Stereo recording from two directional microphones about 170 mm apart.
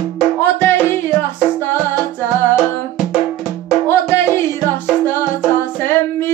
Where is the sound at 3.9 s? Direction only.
15° left (ahead or behind).